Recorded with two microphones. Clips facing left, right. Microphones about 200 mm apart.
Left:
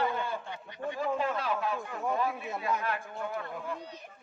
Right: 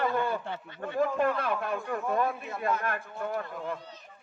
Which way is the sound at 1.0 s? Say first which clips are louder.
Right 5 dB; 55° right (ahead or behind).